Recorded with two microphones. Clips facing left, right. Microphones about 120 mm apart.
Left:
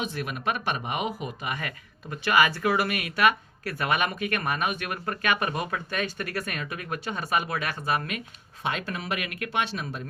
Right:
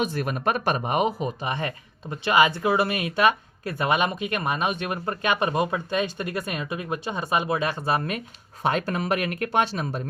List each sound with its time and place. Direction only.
0.0 s speech: 40° right (ahead or behind)